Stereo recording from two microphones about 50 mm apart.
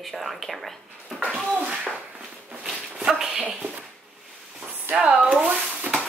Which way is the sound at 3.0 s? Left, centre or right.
Centre.